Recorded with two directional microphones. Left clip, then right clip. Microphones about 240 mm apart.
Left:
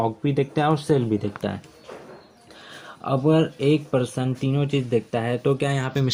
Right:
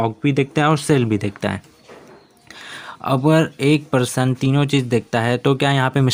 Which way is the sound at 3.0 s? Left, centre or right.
Right.